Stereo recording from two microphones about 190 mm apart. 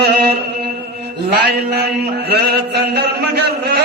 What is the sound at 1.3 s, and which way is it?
Chant, 60° right (ahead or behind).